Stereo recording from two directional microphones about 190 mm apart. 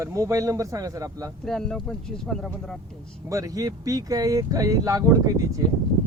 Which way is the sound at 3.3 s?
15° right (ahead or behind).